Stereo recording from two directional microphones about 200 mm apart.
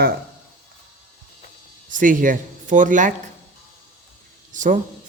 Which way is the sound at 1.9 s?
40° right (ahead or behind).